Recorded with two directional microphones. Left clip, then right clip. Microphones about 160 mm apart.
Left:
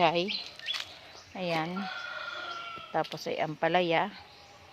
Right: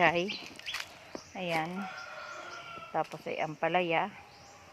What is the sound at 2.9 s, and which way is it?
Speech, 25° left (ahead or behind).